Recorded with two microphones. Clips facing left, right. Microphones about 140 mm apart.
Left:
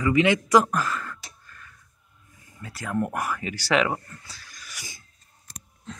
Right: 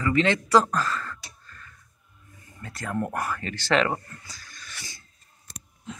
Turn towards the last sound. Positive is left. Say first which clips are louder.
# right 1 dB
turn(degrees=-5)  # may be behind; listen again after turning